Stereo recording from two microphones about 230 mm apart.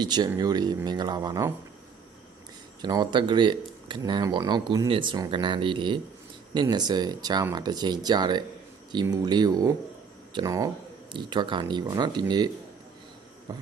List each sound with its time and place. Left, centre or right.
0.0 s speech: centre
2.8 s speech: centre
13.5 s speech: centre